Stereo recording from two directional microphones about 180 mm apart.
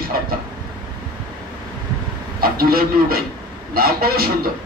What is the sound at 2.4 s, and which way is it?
Speech, 55° right (ahead or behind).